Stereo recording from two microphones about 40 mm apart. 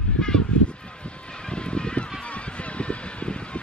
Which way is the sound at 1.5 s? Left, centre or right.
Left.